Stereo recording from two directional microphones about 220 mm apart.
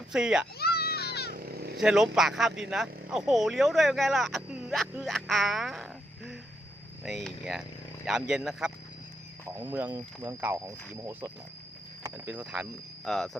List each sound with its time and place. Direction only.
0.1 s speech: 5° right (ahead or behind)
0.6 s children playing: 45° left (ahead or behind)
1.3 s vehicle: 45° right (ahead or behind)
1.8 s speech: centre (ahead or behind)